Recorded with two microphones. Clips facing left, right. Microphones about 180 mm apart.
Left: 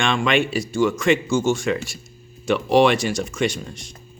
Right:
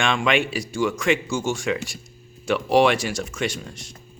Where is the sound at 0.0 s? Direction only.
10° right (ahead or behind).